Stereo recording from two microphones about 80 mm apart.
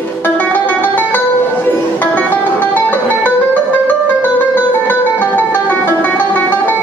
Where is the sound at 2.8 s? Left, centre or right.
Left.